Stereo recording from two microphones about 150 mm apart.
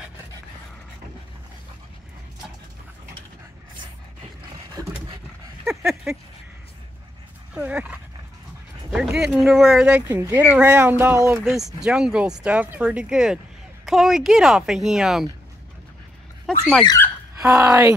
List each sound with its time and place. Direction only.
4.7 s vehicle: 25° right (ahead or behind)
5.6 s a sound: 5° right (ahead or behind)
7.5 s speech: 10° right (ahead or behind)
8.9 s a sound: 5° right (ahead or behind)
9.4 s a woman's voice: 5° right (ahead or behind)
17.4 s speech: 20° right (ahead or behind)